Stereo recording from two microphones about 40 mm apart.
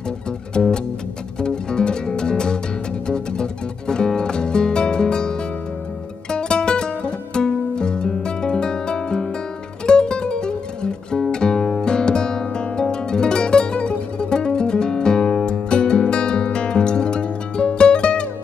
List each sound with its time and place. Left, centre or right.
0.5 s music: left
6.3 s music: left